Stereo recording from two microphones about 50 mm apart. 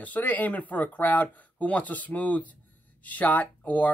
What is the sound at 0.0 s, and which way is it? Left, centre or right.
Speech, left.